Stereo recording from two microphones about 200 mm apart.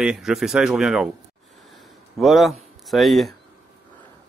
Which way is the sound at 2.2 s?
Centre (ahead or behind).